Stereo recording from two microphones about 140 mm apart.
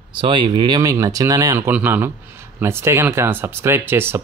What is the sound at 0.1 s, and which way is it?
Speech, 35° right (ahead or behind).